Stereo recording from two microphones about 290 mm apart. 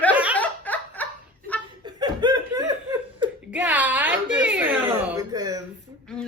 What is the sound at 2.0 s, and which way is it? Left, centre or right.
Chuckle, centre.